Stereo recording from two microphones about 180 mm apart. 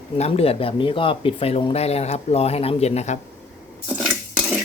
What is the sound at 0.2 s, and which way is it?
Speech, 35° left (ahead or behind).